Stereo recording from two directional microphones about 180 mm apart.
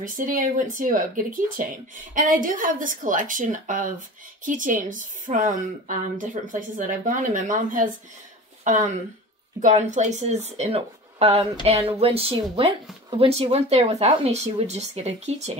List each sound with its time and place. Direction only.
0.0 s a woman's voice: 50° right (ahead or behind)